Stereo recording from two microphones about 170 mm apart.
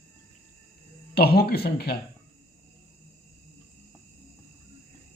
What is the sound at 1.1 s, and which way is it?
Speech, 65° left (ahead or behind).